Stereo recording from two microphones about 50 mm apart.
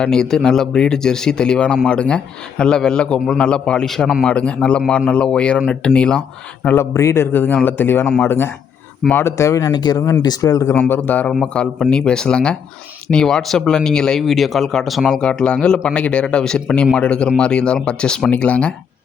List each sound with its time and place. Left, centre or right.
0.0 s speech: centre
3.8 s speech: centre
4.3 s speech: left
6.7 s a man's voice: left
9.0 s speech: centre
9.4 s speech: left
10.8 s a man's voice: left
11.3 s speech: centre
14.2 s speech: centre
15.2 s speech: centre